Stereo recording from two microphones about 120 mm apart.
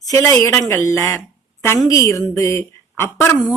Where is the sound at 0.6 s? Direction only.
25° left (ahead or behind).